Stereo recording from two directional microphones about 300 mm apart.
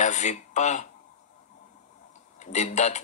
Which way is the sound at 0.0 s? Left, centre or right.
Left.